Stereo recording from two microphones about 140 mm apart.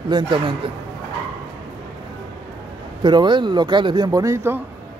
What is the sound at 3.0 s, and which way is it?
Speech, 35° right (ahead or behind).